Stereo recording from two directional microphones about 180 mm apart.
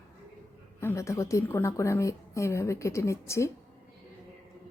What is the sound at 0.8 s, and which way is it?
A woman's voice, 15° left (ahead or behind).